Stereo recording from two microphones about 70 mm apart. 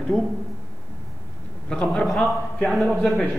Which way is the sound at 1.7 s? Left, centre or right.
Centre.